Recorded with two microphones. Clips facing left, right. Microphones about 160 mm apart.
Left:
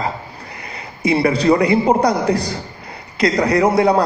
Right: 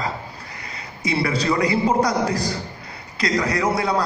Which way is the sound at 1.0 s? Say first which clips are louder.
Left 7 dB; 30° left (ahead or behind).